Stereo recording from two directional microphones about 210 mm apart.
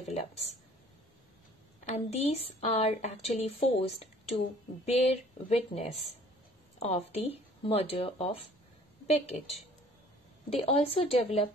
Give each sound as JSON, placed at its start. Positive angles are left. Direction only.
{"t": 1.9, "sound": "a woman's voice", "side_deg": 30}